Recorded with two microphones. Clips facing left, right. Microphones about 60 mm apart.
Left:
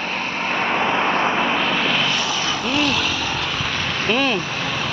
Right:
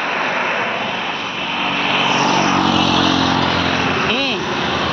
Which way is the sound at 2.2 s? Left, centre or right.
Right.